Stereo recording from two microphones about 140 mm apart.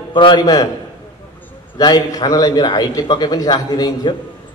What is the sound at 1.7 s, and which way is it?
A man's voice, 25° left (ahead or behind).